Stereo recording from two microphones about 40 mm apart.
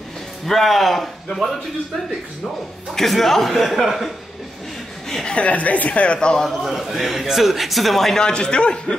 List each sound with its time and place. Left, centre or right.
0.5 s speech: centre
5.3 s speech: left
6.1 s a man's voice: centre
6.4 s speech: centre
8.2 s speech: left